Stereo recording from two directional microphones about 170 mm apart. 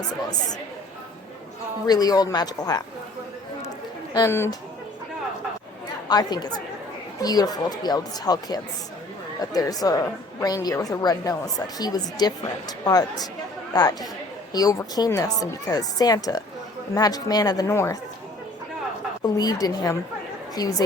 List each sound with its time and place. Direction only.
1.9 s a woman's voice: 25° left (ahead or behind)
4.1 s speech: 15° left (ahead or behind)
6.1 s a woman's voice: 25° left (ahead or behind)
19.2 s a woman's voice: 25° left (ahead or behind)